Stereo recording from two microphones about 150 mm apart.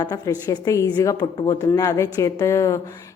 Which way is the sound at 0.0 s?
25° left (ahead or behind).